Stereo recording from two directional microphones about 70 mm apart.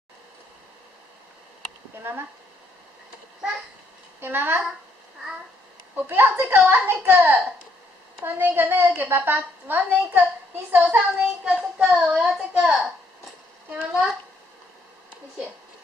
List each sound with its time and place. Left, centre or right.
4.2 s a woman's voice: right
5.9 s a child's voice: right
7.1 s a woman's voice: right
11.5 s a child's voice: centre